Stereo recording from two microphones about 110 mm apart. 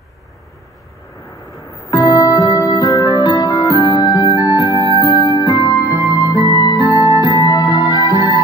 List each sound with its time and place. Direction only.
1.2 s music: 30° left (ahead or behind)